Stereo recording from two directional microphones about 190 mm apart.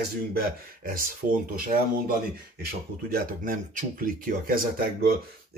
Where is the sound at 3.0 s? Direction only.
50° right (ahead or behind).